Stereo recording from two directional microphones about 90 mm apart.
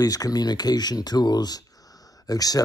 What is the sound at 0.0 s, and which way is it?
Speech, 45° left (ahead or behind).